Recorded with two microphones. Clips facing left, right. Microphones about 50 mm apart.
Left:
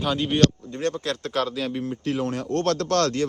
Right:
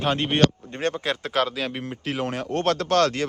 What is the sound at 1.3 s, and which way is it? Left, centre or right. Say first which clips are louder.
Speech: right 1 dB; right.